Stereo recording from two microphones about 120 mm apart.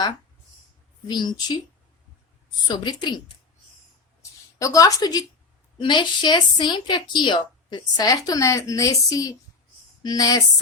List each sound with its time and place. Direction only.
1.0 s a woman's voice: 35° left (ahead or behind)
2.6 s a woman's voice: 40° left (ahead or behind)
4.2 s a sound: 25° left (ahead or behind)
5.8 s a woman's voice: 40° left (ahead or behind)